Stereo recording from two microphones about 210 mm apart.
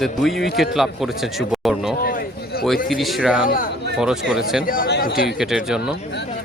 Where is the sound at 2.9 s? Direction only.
Centre (ahead or behind).